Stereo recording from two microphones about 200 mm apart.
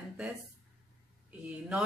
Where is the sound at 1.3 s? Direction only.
5° right (ahead or behind).